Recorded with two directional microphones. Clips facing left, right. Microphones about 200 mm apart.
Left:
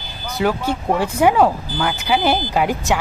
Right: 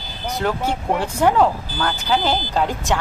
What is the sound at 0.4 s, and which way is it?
Speech, 5° left (ahead or behind).